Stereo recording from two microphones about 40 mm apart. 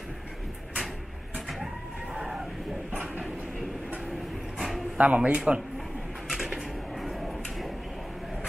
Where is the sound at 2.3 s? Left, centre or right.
Centre.